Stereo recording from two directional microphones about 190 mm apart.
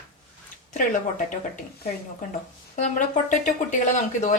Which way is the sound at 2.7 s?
40° left (ahead or behind).